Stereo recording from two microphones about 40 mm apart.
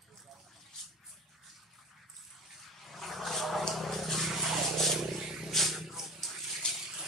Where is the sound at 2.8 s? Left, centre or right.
Centre.